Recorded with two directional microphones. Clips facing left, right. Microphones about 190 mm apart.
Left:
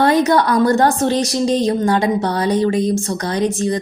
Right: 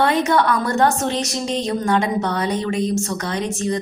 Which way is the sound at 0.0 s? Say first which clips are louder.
Left 4 dB; 40° left (ahead or behind).